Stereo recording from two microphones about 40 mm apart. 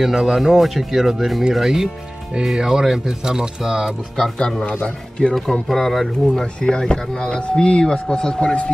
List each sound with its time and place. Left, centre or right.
0.0 s speech: centre
5.3 s speech: centre; by 8.6 s left